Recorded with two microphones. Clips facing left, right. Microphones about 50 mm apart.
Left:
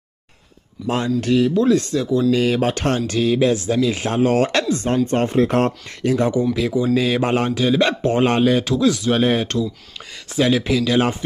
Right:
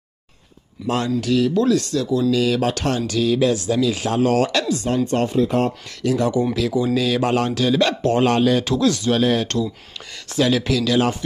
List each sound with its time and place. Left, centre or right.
0.8 s a man's voice: left
4.5 s speech: left
5.4 s speech: left
6.0 s a man's voice: left
6.5 s a man's voice: centre
8.6 s speech: centre
9.1 s a man's voice: left